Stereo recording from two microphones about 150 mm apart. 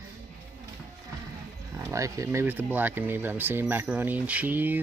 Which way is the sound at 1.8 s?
20° right (ahead or behind).